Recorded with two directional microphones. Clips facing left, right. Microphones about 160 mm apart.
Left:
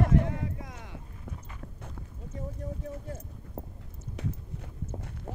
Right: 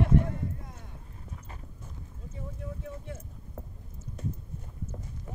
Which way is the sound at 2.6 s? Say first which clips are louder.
Left 2 dB; 35° left (ahead or behind).